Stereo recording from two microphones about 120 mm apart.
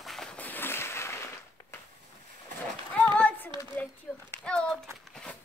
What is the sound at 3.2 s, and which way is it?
Child singing, 15° left (ahead or behind).